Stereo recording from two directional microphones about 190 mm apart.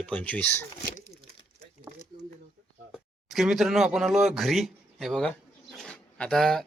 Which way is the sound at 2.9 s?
Centre (ahead or behind).